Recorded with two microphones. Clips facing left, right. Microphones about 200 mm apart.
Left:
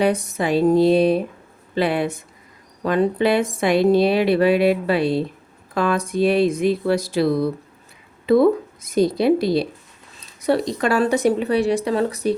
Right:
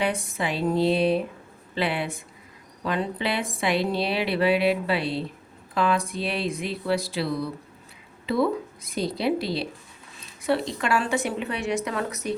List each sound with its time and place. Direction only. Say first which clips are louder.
0.0 s a woman's voice: left 7 dB; 40° left (ahead or behind)
8.9 s a woman's voice: left 9 dB; 45° left (ahead or behind)